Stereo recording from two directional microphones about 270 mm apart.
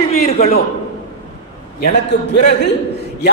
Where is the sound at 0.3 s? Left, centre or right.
Left.